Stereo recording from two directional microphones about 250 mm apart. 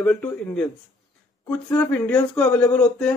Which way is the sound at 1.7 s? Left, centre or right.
Centre.